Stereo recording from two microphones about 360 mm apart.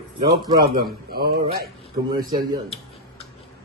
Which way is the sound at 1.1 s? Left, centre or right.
Right.